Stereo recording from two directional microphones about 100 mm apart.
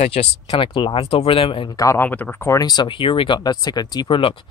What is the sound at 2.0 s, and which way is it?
Speech, 20° left (ahead or behind).